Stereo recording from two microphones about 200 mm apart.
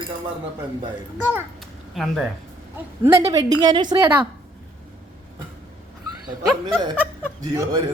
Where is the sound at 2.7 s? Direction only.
15° right (ahead or behind).